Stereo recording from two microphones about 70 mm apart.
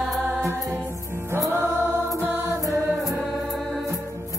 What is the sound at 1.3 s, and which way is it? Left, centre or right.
Music, right.